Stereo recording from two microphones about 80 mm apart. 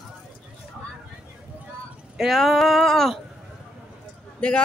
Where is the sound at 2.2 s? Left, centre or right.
Centre.